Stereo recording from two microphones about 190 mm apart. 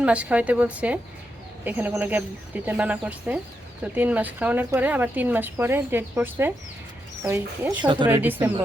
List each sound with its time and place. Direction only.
0.0 s speech: 5° right (ahead or behind)
7.9 s speech: 25° right (ahead or behind)
8.1 s speech: 10° right (ahead or behind)